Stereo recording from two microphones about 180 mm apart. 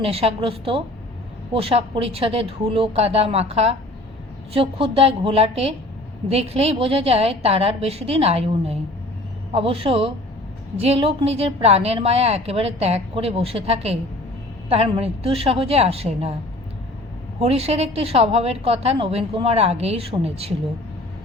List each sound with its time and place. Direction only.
0.0 s speech: 35° right (ahead or behind)
17.4 s speech: 35° right (ahead or behind)